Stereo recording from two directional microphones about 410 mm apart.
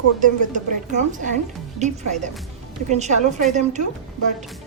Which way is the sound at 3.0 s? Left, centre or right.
Centre.